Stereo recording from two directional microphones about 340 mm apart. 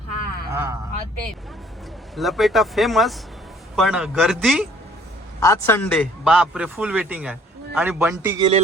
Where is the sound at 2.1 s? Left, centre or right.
Centre.